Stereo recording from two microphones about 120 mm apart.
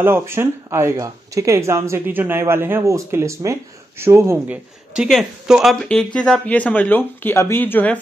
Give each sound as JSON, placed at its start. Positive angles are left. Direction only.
{"t": 0.0, "sound": "speech", "side_deg": -20}
{"t": 4.5, "sound": "speech", "side_deg": -5}
{"t": 6.1, "sound": "speech", "side_deg": 10}